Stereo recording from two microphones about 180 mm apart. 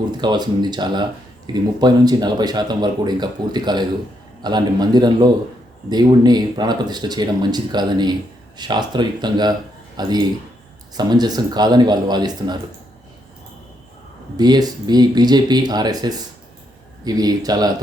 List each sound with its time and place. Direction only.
0.2 s speech: 25° right (ahead or behind)
14.3 s speech: 25° right (ahead or behind)